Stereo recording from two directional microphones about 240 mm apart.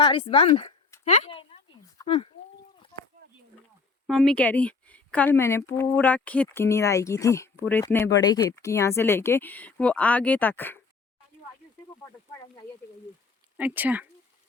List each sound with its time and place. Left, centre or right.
0.0 s speech: left
4.0 s speech: centre
13.6 s speech: centre